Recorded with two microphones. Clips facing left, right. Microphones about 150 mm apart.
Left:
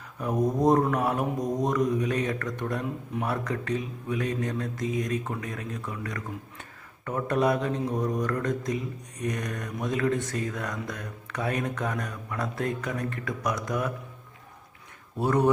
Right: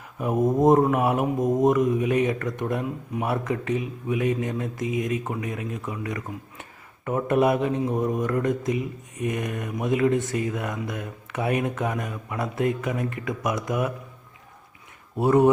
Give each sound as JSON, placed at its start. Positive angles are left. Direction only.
{"t": 0.2, "sound": "speech", "side_deg": -15}
{"t": 0.9, "sound": "speech", "side_deg": -10}
{"t": 1.4, "sound": "speech", "side_deg": -25}